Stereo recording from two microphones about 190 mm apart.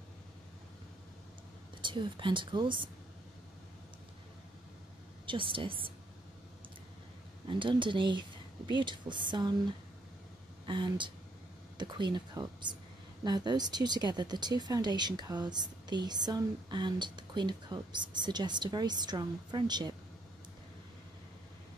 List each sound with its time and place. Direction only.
1.8 s speech: 25° right (ahead or behind)
5.2 s speech: 25° right (ahead or behind)
7.4 s speech: 25° right (ahead or behind)